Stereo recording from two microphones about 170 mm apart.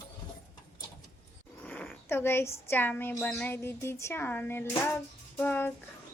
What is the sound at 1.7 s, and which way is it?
Speech, 10° left (ahead or behind).